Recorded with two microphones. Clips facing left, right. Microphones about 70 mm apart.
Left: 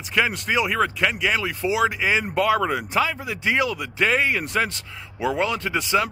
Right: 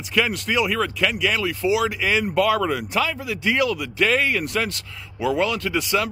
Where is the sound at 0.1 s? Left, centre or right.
Left.